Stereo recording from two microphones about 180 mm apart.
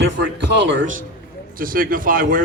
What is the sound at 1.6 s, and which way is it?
Speech, 50° right (ahead or behind).